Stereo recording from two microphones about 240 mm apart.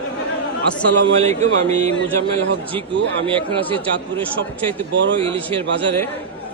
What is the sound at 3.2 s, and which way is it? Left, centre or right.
Speech, centre.